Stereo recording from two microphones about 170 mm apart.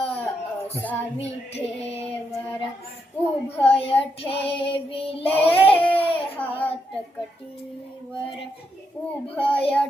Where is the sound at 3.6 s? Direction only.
35° left (ahead or behind).